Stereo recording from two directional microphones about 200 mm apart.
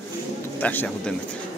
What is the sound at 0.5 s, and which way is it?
Speech, 10° left (ahead or behind).